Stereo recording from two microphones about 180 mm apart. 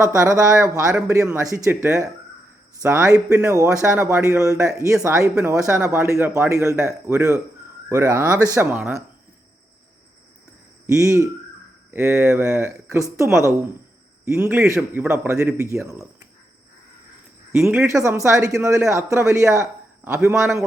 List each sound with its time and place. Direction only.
0.0 s speech: 15° right (ahead or behind)
10.8 s speech: 15° right (ahead or behind)
17.6 s speech: 10° right (ahead or behind)